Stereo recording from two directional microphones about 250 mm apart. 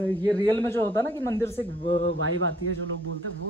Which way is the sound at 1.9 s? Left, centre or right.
Right.